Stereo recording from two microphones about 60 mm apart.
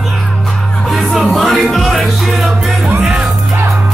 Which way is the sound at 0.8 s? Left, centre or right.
Centre.